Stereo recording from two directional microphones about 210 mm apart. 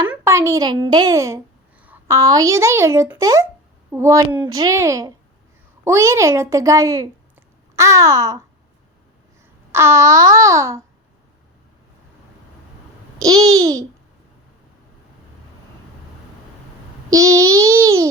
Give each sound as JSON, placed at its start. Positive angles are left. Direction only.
{"t": 0.1, "sound": "a woman's voice", "side_deg": -15}
{"t": 9.7, "sound": "a woman's voice", "side_deg": -15}
{"t": 13.1, "sound": "a woman's voice", "side_deg": -15}
{"t": 17.1, "sound": "a woman's voice", "side_deg": -15}